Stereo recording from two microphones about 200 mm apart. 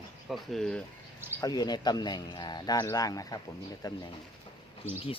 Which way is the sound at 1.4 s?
20° left (ahead or behind).